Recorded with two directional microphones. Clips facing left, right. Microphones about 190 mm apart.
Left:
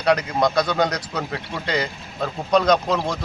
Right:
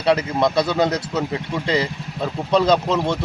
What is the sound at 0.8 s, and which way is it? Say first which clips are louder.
Speech: right 3 dB; 25° right (ahead or behind).